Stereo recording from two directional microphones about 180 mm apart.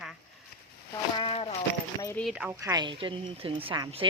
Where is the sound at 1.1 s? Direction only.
30° left (ahead or behind).